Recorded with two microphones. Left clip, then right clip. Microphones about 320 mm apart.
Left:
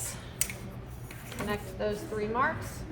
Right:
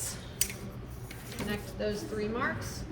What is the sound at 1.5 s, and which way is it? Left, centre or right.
A woman's voice, left.